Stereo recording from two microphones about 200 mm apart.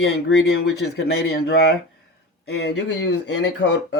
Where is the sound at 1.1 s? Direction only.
55° left (ahead or behind).